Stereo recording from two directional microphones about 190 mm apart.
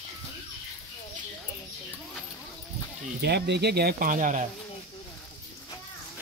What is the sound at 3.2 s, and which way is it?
Speech, 60° right (ahead or behind).